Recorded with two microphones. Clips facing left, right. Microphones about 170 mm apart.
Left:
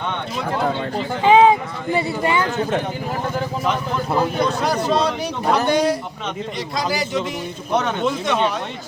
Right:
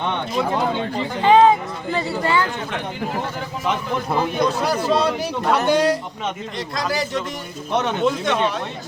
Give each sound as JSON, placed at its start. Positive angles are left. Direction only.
{"t": 1.2, "sound": "speech", "side_deg": 10}
{"t": 4.4, "sound": "speech", "side_deg": 0}